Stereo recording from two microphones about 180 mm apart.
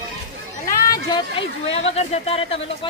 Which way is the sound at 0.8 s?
25° left (ahead or behind).